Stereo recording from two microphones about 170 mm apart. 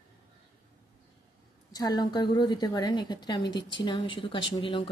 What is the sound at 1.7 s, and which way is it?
A woman's voice, 20° left (ahead or behind).